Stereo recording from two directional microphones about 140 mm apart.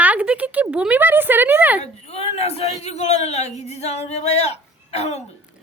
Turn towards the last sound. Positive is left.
turn(degrees=50)  # may be behind; listen again after turning